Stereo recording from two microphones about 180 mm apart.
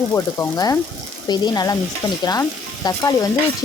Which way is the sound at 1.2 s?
25° left (ahead or behind).